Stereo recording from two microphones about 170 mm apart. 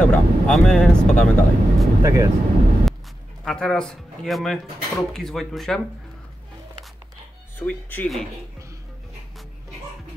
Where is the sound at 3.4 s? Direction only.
Centre (ahead or behind).